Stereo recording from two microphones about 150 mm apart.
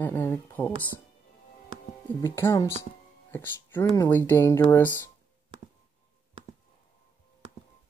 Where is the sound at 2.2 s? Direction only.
15° left (ahead or behind).